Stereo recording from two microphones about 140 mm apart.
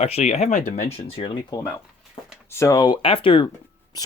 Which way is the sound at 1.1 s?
40° left (ahead or behind).